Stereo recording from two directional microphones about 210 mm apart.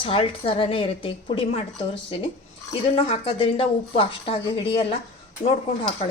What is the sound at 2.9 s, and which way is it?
Speech, 25° left (ahead or behind).